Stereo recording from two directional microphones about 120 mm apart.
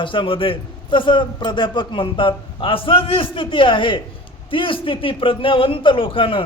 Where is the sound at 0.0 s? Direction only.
45° left (ahead or behind).